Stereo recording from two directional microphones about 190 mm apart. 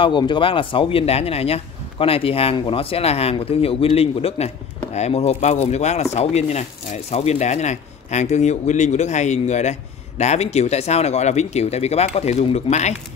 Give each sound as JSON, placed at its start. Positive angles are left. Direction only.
{"t": 0.0, "sound": "speech", "side_deg": 25}